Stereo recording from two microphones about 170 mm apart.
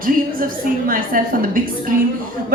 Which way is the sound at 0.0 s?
55° right (ahead or behind).